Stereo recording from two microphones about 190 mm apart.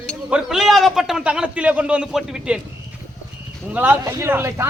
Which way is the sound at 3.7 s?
10° right (ahead or behind).